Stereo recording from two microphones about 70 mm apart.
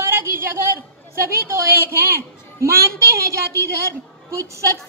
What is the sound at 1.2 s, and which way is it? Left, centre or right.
A woman's voice, right.